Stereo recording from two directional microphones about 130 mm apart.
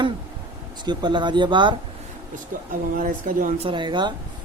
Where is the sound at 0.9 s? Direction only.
35° right (ahead or behind).